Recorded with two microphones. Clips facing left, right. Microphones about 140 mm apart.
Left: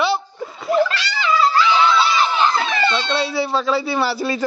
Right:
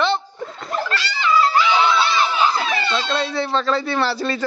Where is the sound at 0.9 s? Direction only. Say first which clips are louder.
Even; 90° left.